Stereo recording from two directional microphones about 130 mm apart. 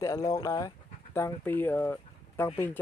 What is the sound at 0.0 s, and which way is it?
Speech, 25° left (ahead or behind).